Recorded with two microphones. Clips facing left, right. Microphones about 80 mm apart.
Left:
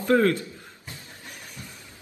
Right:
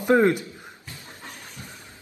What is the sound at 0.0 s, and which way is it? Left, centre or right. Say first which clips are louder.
Speech: right 2 dB; centre.